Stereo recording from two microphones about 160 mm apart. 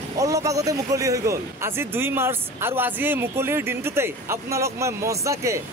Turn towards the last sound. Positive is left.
turn(degrees=-20)  # may be behind; listen again after turning